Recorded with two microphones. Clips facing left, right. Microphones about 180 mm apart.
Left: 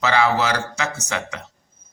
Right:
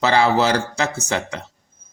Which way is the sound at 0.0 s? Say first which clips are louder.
Right 3 dB; 35° right (ahead or behind).